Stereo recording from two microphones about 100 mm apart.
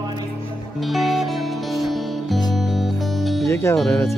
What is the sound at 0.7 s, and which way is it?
Music, centre (ahead or behind).